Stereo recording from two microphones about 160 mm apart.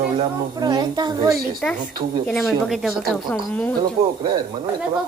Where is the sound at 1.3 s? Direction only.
Centre (ahead or behind).